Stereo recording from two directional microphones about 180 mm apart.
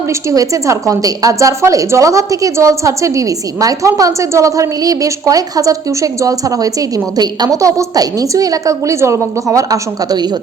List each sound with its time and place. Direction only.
0.1 s a woman's voice: 15° right (ahead or behind)